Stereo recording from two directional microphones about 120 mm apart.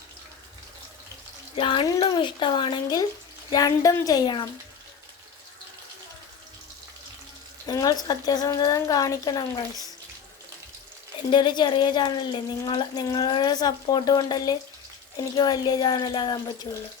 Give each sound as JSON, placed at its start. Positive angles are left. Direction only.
{"t": 1.5, "sound": "speech", "side_deg": 45}
{"t": 7.7, "sound": "speech", "side_deg": 35}
{"t": 11.3, "sound": "speech", "side_deg": 40}